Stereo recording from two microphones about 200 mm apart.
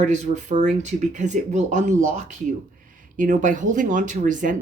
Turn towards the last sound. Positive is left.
turn(degrees=-40)  # may be behind; listen again after turning